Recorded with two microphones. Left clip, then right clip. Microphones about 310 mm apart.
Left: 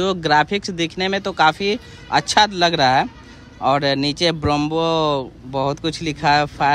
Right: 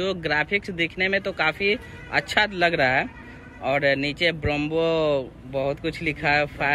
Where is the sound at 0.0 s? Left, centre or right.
Centre.